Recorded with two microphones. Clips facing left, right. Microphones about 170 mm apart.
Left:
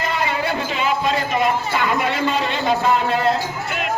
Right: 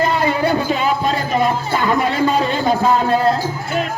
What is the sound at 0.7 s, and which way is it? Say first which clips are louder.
A man's voice: right 3 dB; 40° right (ahead or behind).